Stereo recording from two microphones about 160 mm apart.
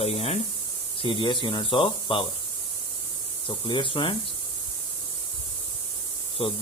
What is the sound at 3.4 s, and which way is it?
Speech, 30° left (ahead or behind).